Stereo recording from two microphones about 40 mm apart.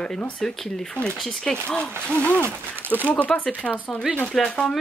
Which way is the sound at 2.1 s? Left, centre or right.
Left.